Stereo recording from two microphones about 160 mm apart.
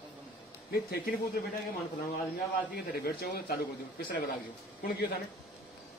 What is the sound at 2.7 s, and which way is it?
Speech, 75° left (ahead or behind).